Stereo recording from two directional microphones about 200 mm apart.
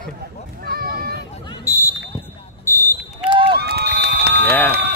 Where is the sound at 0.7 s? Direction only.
50° right (ahead or behind).